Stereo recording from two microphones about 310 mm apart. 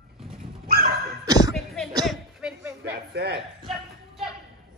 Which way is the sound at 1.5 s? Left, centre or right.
Centre.